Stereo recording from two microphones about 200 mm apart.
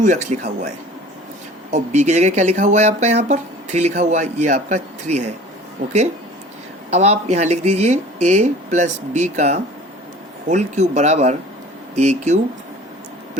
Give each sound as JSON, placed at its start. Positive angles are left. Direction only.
{"t": 0.0, "sound": "speech", "side_deg": -40}
{"t": 1.7, "sound": "speech", "side_deg": -35}
{"t": 6.9, "sound": "speech", "side_deg": -35}